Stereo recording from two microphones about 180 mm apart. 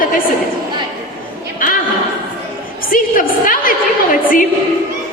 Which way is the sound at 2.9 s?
50° left (ahead or behind).